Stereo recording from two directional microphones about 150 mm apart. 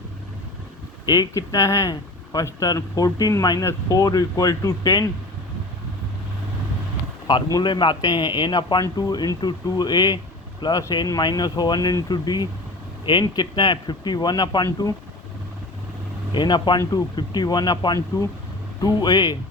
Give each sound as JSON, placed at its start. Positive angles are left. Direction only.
{"t": 1.0, "sound": "speech", "side_deg": 25}
{"t": 7.3, "sound": "speech", "side_deg": 30}
{"t": 16.3, "sound": "speech", "side_deg": 30}